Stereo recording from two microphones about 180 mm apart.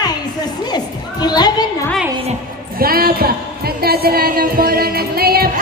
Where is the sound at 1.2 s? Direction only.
20° left (ahead or behind).